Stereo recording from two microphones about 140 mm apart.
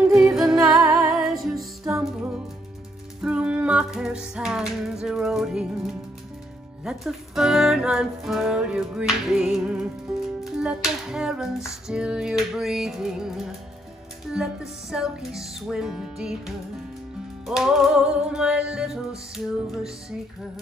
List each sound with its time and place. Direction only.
0.0 s music: 5° right (ahead or behind)